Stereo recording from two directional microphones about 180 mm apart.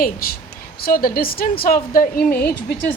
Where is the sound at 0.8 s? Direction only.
55° left (ahead or behind).